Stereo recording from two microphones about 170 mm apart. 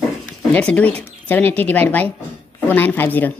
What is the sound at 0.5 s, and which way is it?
Speech, 5° left (ahead or behind).